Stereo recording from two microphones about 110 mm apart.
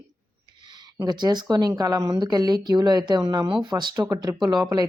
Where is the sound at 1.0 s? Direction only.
40° right (ahead or behind).